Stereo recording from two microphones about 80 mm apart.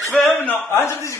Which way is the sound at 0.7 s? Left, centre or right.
Left.